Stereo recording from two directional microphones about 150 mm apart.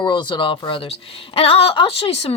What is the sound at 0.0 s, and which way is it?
Speech, 30° left (ahead or behind).